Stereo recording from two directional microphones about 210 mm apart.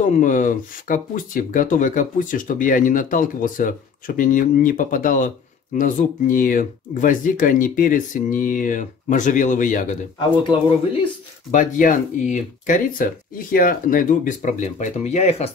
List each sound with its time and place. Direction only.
0.0 s speech: 35° left (ahead or behind)
11.5 s speech: 40° left (ahead or behind)